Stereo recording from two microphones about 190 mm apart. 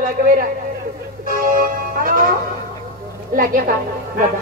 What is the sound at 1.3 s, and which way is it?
Music, 45° right (ahead or behind).